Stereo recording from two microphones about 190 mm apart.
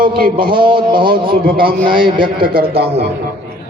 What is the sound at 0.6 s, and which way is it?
Speech, 25° right (ahead or behind).